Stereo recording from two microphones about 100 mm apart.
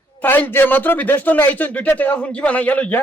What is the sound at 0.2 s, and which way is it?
A man's voice, 20° left (ahead or behind).